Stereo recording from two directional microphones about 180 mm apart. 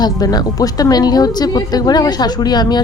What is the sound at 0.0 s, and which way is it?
A woman's voice, 20° left (ahead or behind).